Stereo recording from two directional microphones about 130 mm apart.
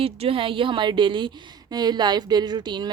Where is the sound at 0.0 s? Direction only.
45° right (ahead or behind).